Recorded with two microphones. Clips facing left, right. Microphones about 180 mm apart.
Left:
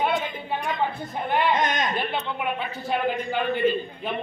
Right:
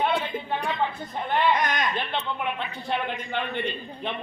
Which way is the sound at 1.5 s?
20° left (ahead or behind).